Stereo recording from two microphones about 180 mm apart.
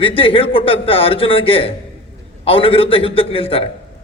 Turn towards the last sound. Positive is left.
turn(degrees=30)  # may be behind; listen again after turning